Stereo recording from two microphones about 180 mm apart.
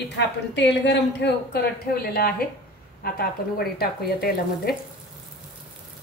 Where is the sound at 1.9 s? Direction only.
55° left (ahead or behind).